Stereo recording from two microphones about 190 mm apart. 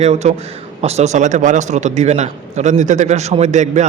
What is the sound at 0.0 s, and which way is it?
A man's voice, 35° right (ahead or behind).